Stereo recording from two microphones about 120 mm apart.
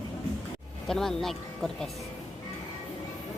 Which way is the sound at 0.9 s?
5° left (ahead or behind).